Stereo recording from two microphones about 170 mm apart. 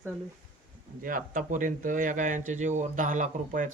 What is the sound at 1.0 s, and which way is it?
Speech, 55° right (ahead or behind).